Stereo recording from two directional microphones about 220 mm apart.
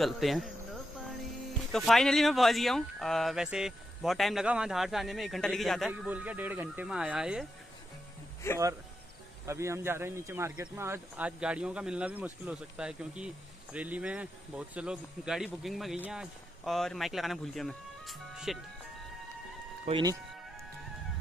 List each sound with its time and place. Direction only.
0.0 s speech: centre (ahead or behind)
1.7 s speech: centre (ahead or behind)
8.4 s speech: 10° left (ahead or behind)
9.5 s speech: 10° right (ahead or behind)
19.9 s speech: 20° right (ahead or behind)